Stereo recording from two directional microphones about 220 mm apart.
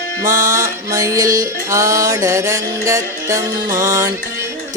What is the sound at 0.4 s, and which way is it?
Music, 15° right (ahead or behind).